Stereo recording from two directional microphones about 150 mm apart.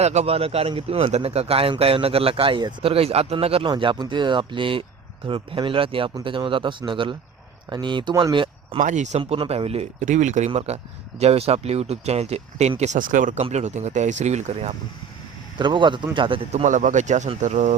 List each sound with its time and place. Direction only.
0.0 s speech: 45° right (ahead or behind)
8.8 s speech: 55° right (ahead or behind)
10.5 s speech: 40° right (ahead or behind); by 13.4 s 60° right (ahead or behind)
13.4 s speech: 50° right (ahead or behind)
15.5 s speech: 30° right (ahead or behind)
16.5 s speech: 50° right (ahead or behind)